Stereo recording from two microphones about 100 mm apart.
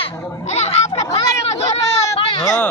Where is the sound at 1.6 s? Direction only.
90° left.